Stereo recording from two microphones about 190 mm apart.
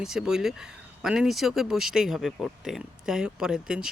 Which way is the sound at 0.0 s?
5° right (ahead or behind).